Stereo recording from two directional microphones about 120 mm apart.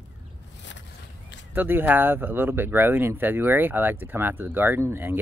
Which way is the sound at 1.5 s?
15° right (ahead or behind).